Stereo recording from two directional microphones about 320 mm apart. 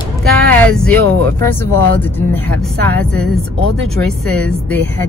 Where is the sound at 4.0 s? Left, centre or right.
Centre.